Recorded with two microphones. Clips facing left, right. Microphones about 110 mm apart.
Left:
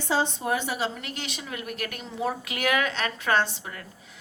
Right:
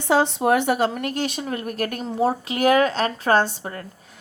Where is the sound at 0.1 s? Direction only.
70° right (ahead or behind).